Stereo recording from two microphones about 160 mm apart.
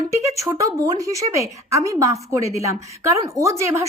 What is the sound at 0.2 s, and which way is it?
Speech, 20° right (ahead or behind).